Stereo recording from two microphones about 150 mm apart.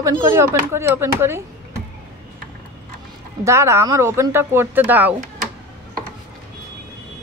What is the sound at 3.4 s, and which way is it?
Speech, 20° right (ahead or behind).